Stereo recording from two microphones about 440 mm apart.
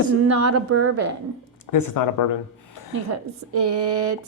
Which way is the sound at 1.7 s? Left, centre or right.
Left.